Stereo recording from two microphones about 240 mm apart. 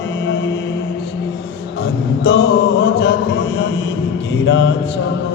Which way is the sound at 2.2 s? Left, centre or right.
Left.